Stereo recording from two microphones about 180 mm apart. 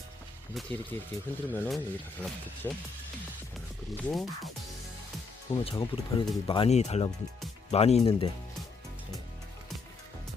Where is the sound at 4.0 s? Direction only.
Centre (ahead or behind).